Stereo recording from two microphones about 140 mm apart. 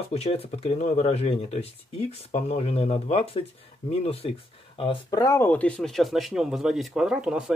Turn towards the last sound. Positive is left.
turn(degrees=-5)  # may be behind; listen again after turning